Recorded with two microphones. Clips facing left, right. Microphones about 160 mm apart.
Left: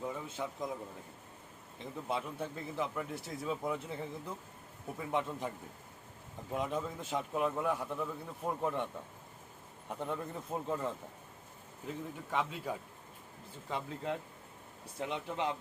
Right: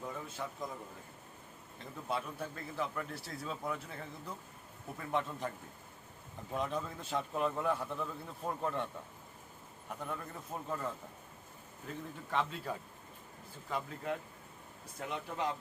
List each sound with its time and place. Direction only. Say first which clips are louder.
0.0 s a man's voice: left 3 dB; 20° left (ahead or behind)
1.8 s a man's voice: left 1 dB; 20° left (ahead or behind)
6.5 s a man's voice: left 1 dB; 15° left (ahead or behind)
10.0 s a man's voice: left 5 dB; 25° left (ahead or behind)
13.7 s speech: even; 25° left (ahead or behind)